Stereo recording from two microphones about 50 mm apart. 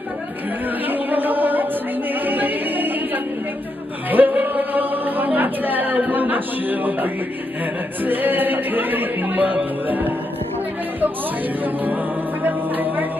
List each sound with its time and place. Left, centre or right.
0.8 s music: right
2.2 s a capella: right
4.1 s music: right
11.6 s music: right